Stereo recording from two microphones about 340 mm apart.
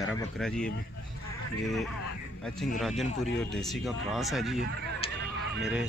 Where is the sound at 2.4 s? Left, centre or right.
Centre.